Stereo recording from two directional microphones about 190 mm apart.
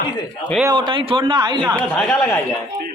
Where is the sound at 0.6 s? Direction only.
25° right (ahead or behind).